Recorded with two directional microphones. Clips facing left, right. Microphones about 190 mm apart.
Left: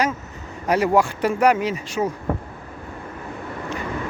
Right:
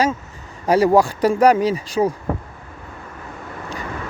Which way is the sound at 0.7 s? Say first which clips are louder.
Right 4 dB; 35° right (ahead or behind).